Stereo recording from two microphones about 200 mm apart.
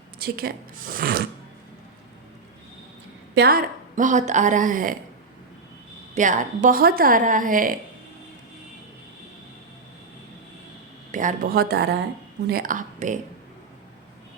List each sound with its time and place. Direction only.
0.2 s a woman's voice: 50° right (ahead or behind)
3.3 s a woman's voice: 50° right (ahead or behind)
6.1 s a woman's voice: 40° right (ahead or behind)
11.1 s a woman's voice: 40° right (ahead or behind)